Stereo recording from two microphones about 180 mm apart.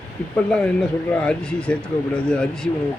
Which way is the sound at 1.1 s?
5° left (ahead or behind).